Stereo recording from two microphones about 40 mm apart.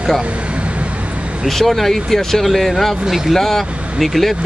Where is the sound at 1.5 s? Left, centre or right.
Centre.